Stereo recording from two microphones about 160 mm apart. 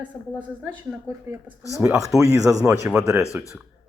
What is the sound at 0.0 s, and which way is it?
A woman's voice, 10° right (ahead or behind).